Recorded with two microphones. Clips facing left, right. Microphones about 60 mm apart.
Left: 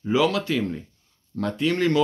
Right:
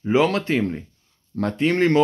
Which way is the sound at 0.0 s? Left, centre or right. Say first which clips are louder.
Right 2 dB; right.